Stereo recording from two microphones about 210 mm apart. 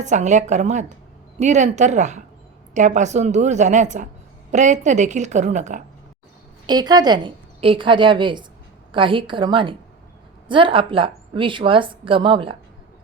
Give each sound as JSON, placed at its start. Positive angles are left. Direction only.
{"t": 0.0, "sound": "a woman's voice", "side_deg": -35}
{"t": 6.7, "sound": "a woman's voice", "side_deg": -20}